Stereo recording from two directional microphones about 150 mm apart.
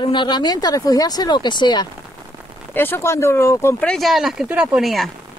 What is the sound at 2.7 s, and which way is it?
Speech, 15° left (ahead or behind).